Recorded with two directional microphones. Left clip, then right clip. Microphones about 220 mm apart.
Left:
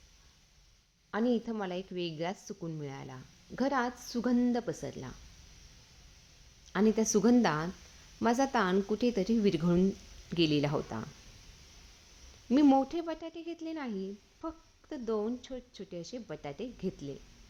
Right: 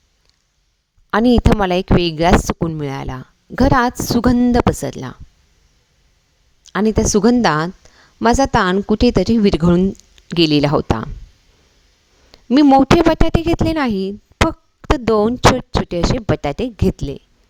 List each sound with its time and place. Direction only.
1.1 s speech: 50° right (ahead or behind)
6.7 s speech: 45° right (ahead or behind)
12.5 s speech: 45° right (ahead or behind)